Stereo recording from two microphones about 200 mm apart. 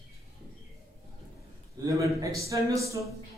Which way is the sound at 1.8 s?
15° right (ahead or behind).